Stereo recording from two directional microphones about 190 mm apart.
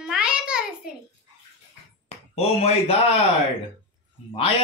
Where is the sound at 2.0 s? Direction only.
35° left (ahead or behind).